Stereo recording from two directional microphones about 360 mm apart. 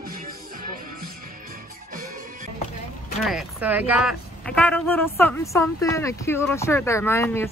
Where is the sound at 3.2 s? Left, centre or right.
Centre.